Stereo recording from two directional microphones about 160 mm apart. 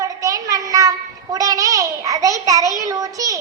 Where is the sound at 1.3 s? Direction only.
20° right (ahead or behind).